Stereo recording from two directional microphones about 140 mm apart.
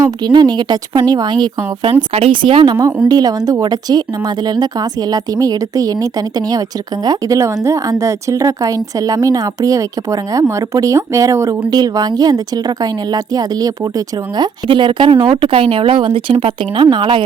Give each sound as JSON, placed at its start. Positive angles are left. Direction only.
{"t": 0.0, "sound": "speech", "side_deg": -30}